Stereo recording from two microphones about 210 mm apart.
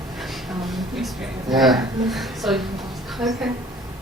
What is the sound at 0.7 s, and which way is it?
A woman's voice, centre (ahead or behind).